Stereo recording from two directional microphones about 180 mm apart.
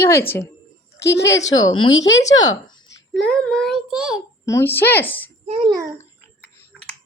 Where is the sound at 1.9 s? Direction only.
90° left.